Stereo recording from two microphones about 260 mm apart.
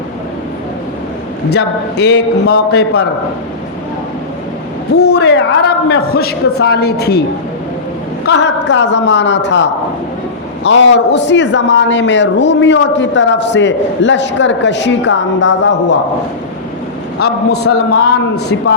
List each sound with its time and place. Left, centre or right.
1.5 s a man's voice: left
4.9 s a man's voice: left
8.3 s a man's voice: left